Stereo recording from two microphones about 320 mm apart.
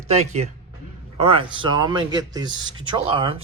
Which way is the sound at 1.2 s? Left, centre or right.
Centre.